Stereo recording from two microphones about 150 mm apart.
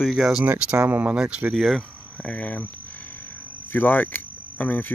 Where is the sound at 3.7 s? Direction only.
10° left (ahead or behind).